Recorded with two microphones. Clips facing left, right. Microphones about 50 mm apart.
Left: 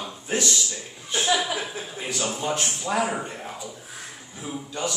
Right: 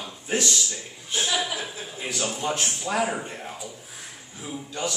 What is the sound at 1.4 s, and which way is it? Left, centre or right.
Speech, centre.